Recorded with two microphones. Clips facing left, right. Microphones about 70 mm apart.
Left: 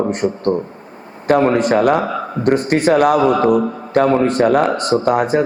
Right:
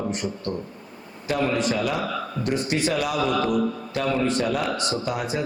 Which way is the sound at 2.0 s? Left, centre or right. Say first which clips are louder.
Left 7 dB; left.